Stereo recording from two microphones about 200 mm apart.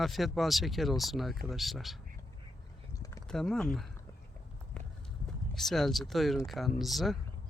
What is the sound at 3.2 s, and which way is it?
Speech, centre (ahead or behind).